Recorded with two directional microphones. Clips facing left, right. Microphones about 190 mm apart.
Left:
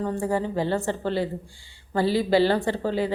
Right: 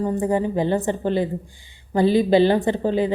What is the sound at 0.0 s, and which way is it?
A woman's voice, 20° right (ahead or behind).